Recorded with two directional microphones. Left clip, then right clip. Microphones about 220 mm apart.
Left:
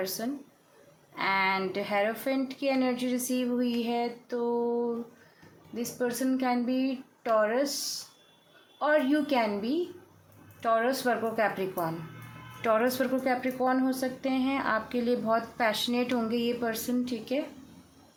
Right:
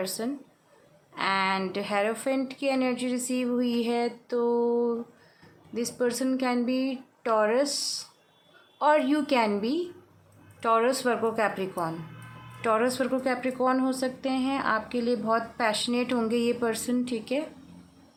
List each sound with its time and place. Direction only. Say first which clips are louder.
1.1 s a woman's voice: right 1 dB; 10° right (ahead or behind)